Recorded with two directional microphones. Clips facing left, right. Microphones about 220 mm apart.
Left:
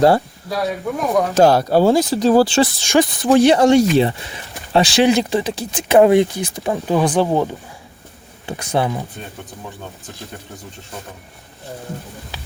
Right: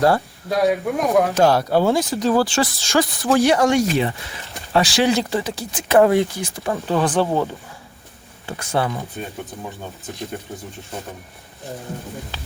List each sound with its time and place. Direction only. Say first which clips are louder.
0.5 s speech: right 3 dB; 15° right (ahead or behind)
1.5 s speech: left 3 dB; 35° left (ahead or behind)
2.8 s speech: left 4 dB; 20° left (ahead or behind)